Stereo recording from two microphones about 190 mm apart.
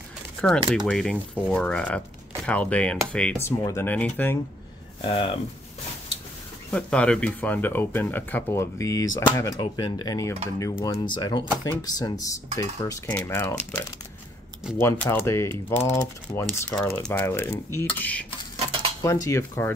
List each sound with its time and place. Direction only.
0.4 s speech: centre (ahead or behind)
5.0 s speech: 30° left (ahead or behind)
6.7 s speech: 5° left (ahead or behind)
14.8 s speech: 15° left (ahead or behind)
18.6 s cutlery: 30° right (ahead or behind)
19.0 s speech: 15° left (ahead or behind)